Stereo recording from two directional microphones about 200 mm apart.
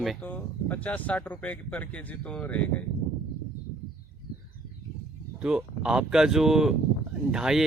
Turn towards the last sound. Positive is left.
turn(degrees=-5)  # may be behind; listen again after turning